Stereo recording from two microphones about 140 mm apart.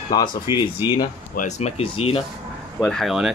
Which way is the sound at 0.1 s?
30° left (ahead or behind).